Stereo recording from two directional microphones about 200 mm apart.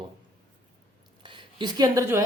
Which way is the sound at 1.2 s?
25° right (ahead or behind).